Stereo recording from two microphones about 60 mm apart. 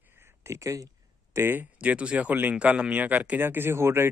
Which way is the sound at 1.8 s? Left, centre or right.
Right.